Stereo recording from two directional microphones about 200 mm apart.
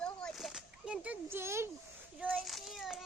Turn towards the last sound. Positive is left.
turn(degrees=0)  # may be behind; listen again after turning